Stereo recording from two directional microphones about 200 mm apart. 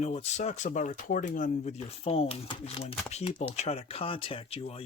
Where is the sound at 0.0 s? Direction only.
35° left (ahead or behind).